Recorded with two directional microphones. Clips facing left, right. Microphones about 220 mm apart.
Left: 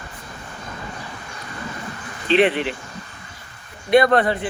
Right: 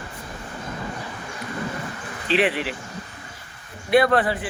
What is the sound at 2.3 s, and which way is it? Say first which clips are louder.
Speech: left 4 dB; 5° right (ahead or behind).